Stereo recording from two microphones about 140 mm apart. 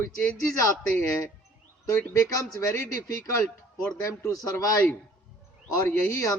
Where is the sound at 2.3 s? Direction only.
20° left (ahead or behind).